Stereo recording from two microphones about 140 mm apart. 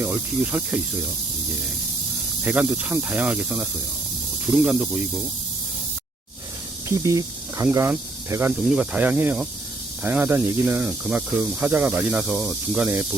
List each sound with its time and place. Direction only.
0.0 s speech: 10° right (ahead or behind)
2.4 s speech: 10° right (ahead or behind)
6.8 s speech: 25° right (ahead or behind)